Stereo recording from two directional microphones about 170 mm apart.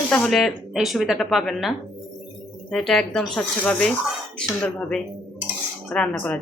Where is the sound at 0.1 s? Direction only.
5° left (ahead or behind).